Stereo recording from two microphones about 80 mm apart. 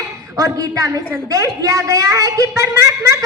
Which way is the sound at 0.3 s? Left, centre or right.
Right.